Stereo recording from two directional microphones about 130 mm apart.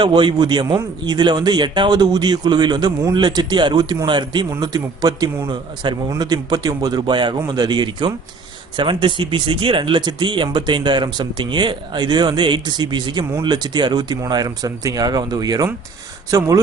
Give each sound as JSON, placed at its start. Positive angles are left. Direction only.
{"t": 0.0, "sound": "a man's voice", "side_deg": -40}